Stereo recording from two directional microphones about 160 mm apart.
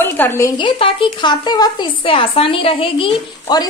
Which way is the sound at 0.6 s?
35° left (ahead or behind).